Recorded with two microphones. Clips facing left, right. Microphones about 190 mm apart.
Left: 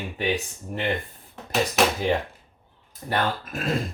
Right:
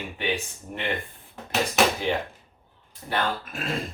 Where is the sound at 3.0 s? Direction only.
35° left (ahead or behind).